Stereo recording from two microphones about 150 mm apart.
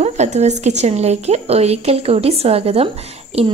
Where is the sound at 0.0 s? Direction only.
50° right (ahead or behind).